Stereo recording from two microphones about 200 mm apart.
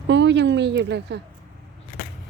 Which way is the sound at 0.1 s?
60° right (ahead or behind).